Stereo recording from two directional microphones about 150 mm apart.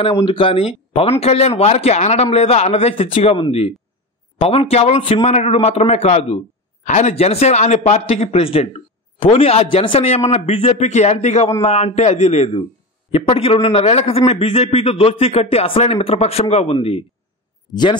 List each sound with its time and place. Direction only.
0.1 s a man's voice: 30° left (ahead or behind)